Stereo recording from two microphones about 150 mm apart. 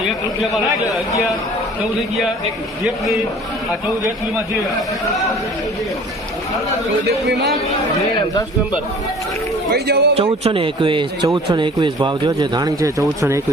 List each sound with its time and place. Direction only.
9.7 s a man's voice: 90° right
10.2 s speech: 40° right (ahead or behind); by 12.9 s 25° right (ahead or behind)